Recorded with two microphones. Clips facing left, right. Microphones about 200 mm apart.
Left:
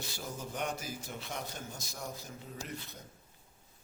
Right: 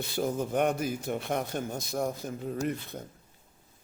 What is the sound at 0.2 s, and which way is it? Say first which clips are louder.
Speech: right 13 dB; 55° right (ahead or behind).